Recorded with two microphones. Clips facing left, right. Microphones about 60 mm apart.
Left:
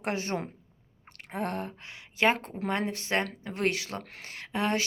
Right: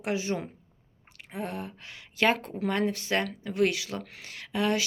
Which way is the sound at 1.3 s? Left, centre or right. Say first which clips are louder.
Left 2 dB; left.